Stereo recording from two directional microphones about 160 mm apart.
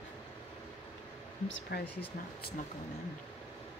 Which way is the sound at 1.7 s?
90° left.